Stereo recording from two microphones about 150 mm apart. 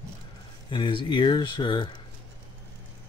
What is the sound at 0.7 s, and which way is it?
Speech, 30° left (ahead or behind).